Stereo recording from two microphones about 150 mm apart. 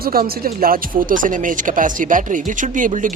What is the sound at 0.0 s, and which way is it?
Speech, 85° right.